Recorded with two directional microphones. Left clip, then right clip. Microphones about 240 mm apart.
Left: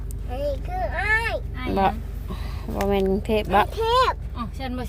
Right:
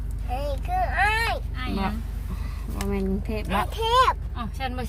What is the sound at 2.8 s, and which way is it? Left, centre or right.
Speech, left.